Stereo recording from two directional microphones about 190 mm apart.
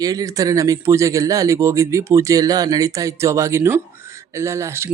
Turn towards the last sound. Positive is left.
turn(degrees=-15)  # may be behind; listen again after turning